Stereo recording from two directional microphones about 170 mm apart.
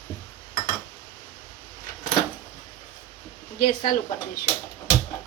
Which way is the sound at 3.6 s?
55° left (ahead or behind).